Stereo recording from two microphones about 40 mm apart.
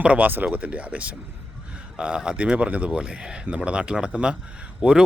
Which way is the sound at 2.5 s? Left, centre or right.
Right.